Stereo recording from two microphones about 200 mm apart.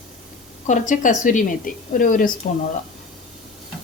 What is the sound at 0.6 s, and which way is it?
A woman's voice, 40° left (ahead or behind).